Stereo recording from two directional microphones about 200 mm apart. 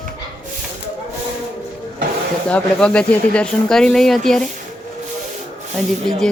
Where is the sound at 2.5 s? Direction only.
5° left (ahead or behind).